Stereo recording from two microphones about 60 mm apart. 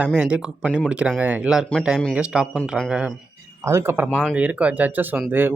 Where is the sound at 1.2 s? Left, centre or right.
Right.